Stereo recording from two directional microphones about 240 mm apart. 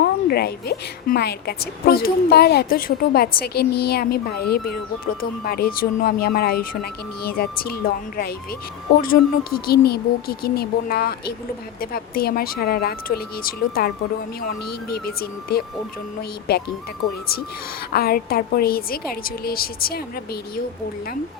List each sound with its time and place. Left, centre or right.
0.0 s a woman's voice: left
14.9 s a woman's voice: left
17.9 s a woman's voice: left